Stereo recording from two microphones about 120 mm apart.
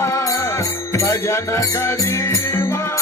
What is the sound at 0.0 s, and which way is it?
Music, 25° left (ahead or behind).